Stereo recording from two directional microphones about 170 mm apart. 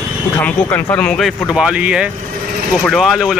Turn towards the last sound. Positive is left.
turn(degrees=0)  # may be behind; listen again after turning